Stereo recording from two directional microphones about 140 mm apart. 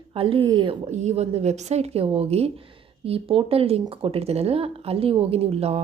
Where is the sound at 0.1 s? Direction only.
40° right (ahead or behind).